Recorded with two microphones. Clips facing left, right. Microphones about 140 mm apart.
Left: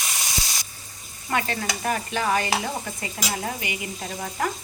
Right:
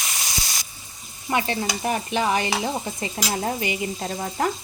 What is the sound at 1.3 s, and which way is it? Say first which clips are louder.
Stir: right 2 dB; 25° right (ahead or behind).